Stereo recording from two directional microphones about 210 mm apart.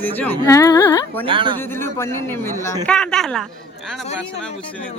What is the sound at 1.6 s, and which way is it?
A man's voice, 10° left (ahead or behind).